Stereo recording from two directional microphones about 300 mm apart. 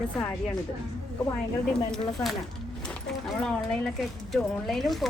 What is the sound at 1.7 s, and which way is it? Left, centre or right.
Speech, centre.